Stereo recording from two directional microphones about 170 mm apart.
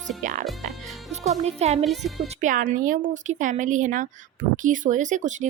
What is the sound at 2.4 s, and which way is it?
A woman's voice, 50° right (ahead or behind).